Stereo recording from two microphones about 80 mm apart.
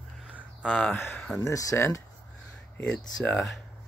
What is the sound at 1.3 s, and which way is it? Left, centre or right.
Speech, left.